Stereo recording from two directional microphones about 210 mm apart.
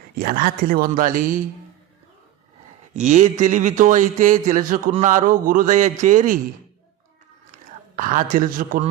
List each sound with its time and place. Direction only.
0.2 s speech: 40° right (ahead or behind)
2.9 s speech: 35° right (ahead or behind)
7.9 s speech: 40° right (ahead or behind)